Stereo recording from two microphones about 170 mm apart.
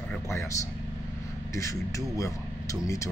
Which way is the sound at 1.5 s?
20° left (ahead or behind).